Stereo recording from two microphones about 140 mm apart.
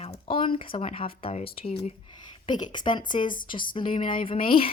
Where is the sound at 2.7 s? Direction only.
35° left (ahead or behind).